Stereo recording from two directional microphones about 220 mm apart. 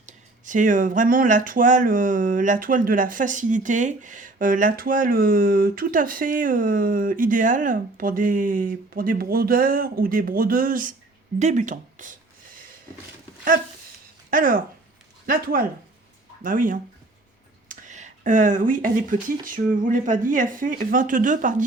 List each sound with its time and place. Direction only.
0.0 s speech: 35° right (ahead or behind)
14.3 s speech: 40° right (ahead or behind)
17.7 s a sound: 35° right (ahead or behind)
19.5 s speech: 35° right (ahead or behind)